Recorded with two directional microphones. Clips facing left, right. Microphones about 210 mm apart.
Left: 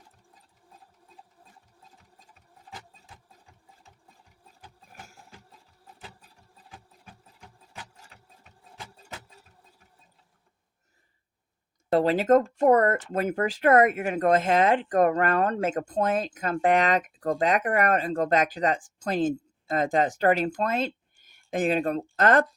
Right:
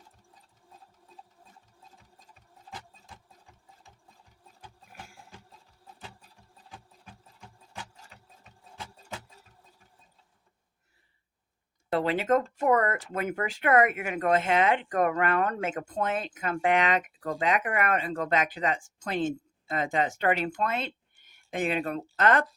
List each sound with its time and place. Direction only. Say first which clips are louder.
11.9 s speech: left 5 dB; 40° left (ahead or behind)